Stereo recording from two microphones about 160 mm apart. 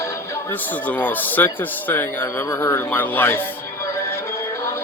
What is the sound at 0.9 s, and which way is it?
Speech, 10° left (ahead or behind).